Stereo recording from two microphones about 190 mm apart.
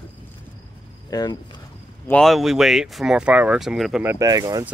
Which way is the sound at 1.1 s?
20° left (ahead or behind).